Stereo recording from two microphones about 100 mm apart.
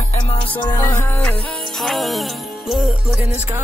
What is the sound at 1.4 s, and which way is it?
Music, 5° left (ahead or behind).